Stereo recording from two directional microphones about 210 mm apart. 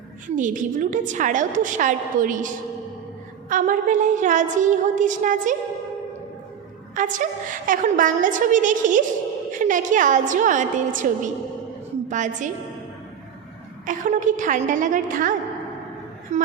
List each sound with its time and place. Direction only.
0.3 s a woman's voice: 40° right (ahead or behind)
3.5 s a woman's voice: 40° right (ahead or behind)
6.9 s a woman's voice: 40° right (ahead or behind)
13.8 s a woman's voice: 35° right (ahead or behind)